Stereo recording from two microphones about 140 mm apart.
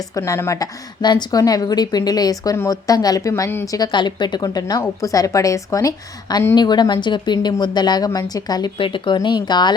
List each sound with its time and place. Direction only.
0.1 s a woman's voice: 20° left (ahead or behind)
3.8 s a woman's voice: 30° left (ahead or behind)